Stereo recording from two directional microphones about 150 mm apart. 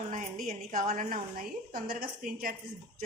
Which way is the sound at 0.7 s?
60° right (ahead or behind).